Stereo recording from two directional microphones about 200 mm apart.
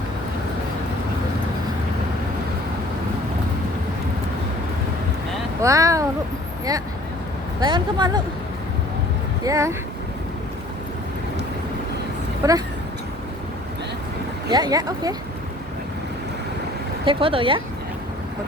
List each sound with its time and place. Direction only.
5.6 s speech: 15° right (ahead or behind)
7.6 s speech: 20° right (ahead or behind)
9.4 s speech: 15° right (ahead or behind)
12.4 s speech: 15° right (ahead or behind)
14.5 s speech: 20° right (ahead or behind)
17.1 s speech: 25° right (ahead or behind)